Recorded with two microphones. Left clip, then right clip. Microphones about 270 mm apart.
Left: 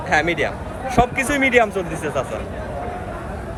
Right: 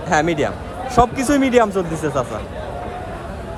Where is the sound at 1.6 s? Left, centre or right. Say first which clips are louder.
Right 2 dB; right.